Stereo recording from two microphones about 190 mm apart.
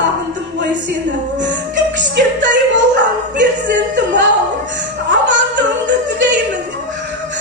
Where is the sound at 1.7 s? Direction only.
70° right (ahead or behind).